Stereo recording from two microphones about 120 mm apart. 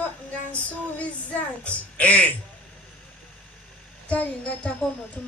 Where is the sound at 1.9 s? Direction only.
10° left (ahead or behind).